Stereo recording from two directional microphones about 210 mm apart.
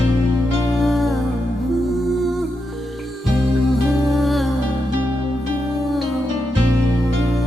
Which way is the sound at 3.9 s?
Centre (ahead or behind).